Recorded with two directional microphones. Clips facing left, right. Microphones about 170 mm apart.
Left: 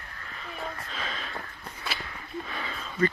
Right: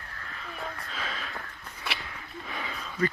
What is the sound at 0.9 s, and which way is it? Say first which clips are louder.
Sniff: even; 5° right (ahead or behind).